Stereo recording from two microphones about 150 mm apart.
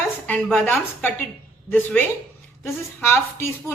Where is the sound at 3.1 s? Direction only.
15° left (ahead or behind).